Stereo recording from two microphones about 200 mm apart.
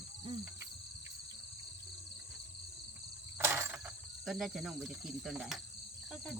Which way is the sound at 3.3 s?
15° right (ahead or behind).